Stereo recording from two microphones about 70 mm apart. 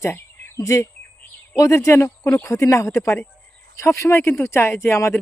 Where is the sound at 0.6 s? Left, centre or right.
Left.